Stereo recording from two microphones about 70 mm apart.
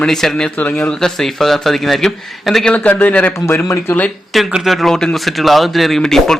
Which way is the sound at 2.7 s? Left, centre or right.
Left.